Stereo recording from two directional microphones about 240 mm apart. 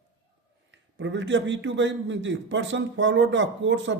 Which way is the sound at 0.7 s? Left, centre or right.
Right.